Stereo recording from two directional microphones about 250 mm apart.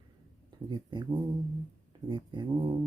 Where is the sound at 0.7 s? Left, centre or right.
Centre.